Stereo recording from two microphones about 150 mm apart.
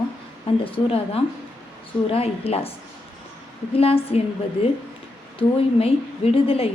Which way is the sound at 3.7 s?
40° left (ahead or behind).